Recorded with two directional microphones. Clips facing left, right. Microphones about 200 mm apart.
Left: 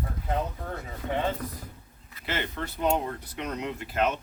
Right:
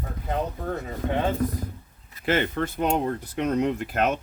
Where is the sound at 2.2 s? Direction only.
50° right (ahead or behind).